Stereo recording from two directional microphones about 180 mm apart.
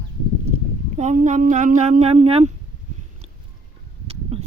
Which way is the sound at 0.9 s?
40° right (ahead or behind).